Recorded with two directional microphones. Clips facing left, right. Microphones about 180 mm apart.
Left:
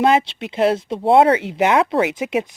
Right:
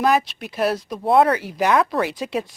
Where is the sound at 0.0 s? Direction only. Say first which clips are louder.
Left 3 dB; 25° left (ahead or behind).